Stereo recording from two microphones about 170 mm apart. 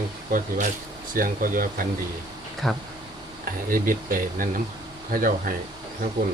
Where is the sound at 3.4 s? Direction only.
55° right (ahead or behind).